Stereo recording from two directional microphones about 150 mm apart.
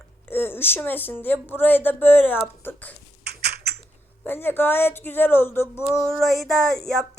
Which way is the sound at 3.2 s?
90° right.